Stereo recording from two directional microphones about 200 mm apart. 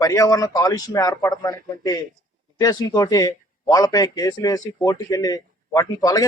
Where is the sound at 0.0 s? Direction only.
15° left (ahead or behind).